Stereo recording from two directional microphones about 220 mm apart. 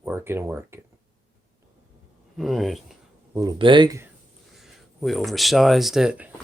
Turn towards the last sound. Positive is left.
turn(degrees=-5)  # may be behind; listen again after turning